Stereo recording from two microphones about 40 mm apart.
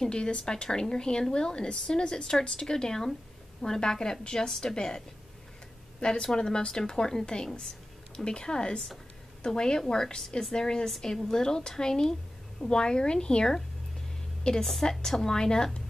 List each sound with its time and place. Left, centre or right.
0.0 s a woman's voice: left